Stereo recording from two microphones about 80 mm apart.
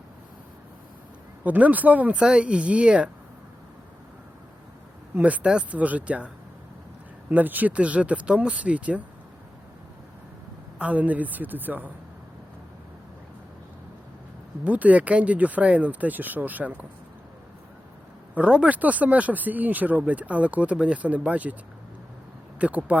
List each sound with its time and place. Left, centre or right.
1.5 s speech: centre
5.1 s speech: centre
10.8 s speech: centre
14.6 s speech: centre
18.3 s speech: centre
22.5 s speech: centre